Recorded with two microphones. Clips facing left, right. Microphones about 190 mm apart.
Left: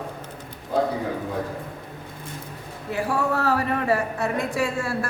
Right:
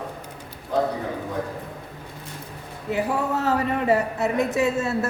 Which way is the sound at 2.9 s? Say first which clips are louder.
Even; 20° right (ahead or behind).